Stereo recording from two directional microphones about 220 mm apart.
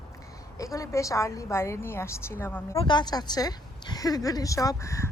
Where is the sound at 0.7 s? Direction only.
15° left (ahead or behind).